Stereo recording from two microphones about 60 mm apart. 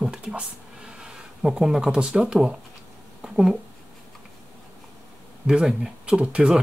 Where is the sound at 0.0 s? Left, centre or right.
Centre.